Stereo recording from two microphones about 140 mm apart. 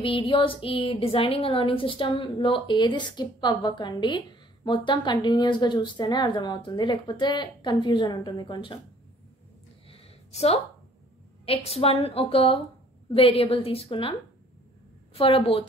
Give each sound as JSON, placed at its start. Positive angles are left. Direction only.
{"t": 0.0, "sound": "a woman's voice", "side_deg": 40}
{"t": 9.8, "sound": "a sound", "side_deg": 45}
{"t": 11.4, "sound": "a woman's voice", "side_deg": 45}
{"t": 15.1, "sound": "a woman's voice", "side_deg": 40}